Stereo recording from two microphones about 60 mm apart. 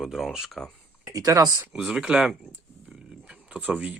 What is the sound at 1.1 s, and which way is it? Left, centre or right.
Speech, right.